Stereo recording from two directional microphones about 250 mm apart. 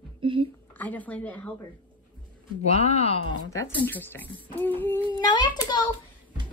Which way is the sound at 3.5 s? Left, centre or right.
Centre.